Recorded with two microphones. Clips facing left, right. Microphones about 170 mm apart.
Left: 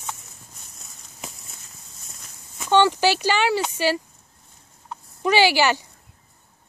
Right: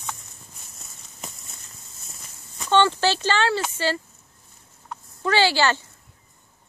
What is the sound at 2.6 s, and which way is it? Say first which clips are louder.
Speech: left 2 dB; 10° left (ahead or behind).